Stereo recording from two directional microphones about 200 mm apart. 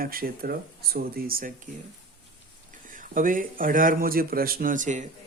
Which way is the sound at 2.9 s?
40° right (ahead or behind).